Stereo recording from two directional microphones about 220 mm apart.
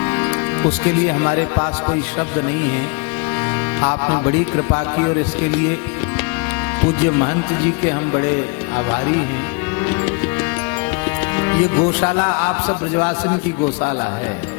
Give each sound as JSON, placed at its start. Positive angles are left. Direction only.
{"t": 0.1, "sound": "music", "side_deg": 15}
{"t": 3.8, "sound": "music", "side_deg": 20}
{"t": 7.9, "sound": "speech", "side_deg": 15}
{"t": 11.3, "sound": "music", "side_deg": 15}